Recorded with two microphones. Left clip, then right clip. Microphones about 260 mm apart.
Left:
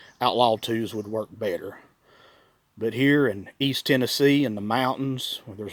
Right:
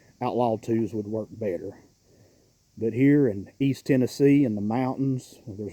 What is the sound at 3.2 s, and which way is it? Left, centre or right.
Speech, centre.